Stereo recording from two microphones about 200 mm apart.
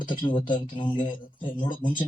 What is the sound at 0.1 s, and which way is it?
Speech, 25° left (ahead or behind).